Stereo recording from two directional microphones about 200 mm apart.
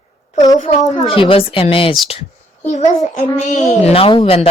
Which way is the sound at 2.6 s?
40° left (ahead or behind).